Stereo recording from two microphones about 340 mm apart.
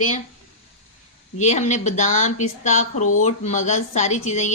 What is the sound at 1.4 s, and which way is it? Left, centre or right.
Speech, centre.